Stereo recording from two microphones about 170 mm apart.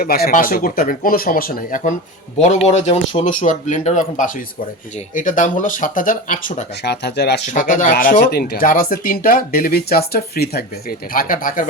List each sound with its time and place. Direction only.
0.0 s speech: 60° left (ahead or behind); by 3.2 s 35° left (ahead or behind)
3.2 s speech: 50° left (ahead or behind)
6.8 s speech: 75° left (ahead or behind)
7.5 s speech: 50° left (ahead or behind)